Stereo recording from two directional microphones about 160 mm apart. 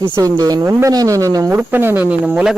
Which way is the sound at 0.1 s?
25° right (ahead or behind).